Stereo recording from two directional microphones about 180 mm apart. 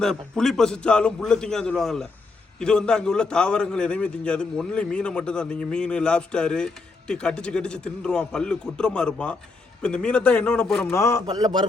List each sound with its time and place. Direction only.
0.0 s a man's voice: 5° left (ahead or behind)
10.9 s a man's voice: 15° left (ahead or behind)
11.3 s a man's voice: 20° right (ahead or behind)